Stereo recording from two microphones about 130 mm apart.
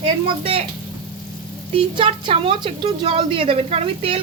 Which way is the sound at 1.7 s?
40° right (ahead or behind).